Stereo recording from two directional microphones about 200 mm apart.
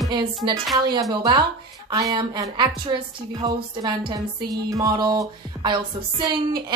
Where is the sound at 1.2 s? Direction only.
20° right (ahead or behind).